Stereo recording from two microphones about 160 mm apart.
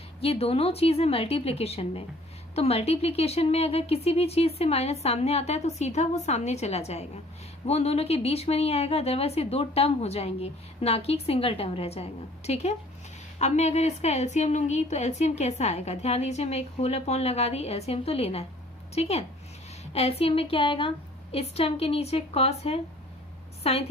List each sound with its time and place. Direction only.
0.2 s a woman's voice: 35° left (ahead or behind)